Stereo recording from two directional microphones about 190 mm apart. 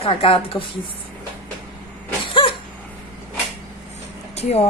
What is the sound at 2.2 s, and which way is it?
Cough, 25° left (ahead or behind).